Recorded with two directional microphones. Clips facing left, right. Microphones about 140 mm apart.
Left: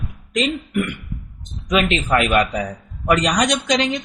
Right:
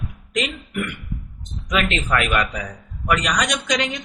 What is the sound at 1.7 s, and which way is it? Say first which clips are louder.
Speech: left 4 dB; 20° left (ahead or behind).